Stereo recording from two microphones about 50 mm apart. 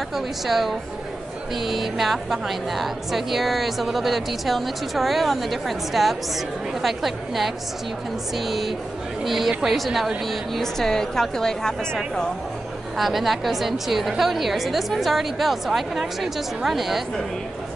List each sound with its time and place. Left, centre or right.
0.1 s a woman's voice: centre
12.9 s a woman's voice: centre